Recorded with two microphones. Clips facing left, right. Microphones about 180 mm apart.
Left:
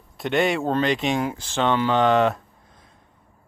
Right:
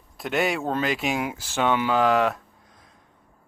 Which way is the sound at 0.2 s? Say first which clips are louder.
Left 3 dB; centre (ahead or behind).